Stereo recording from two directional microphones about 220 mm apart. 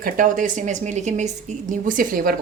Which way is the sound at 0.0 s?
35° right (ahead or behind).